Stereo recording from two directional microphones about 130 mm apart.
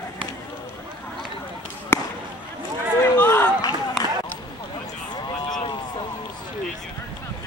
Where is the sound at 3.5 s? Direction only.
30° left (ahead or behind).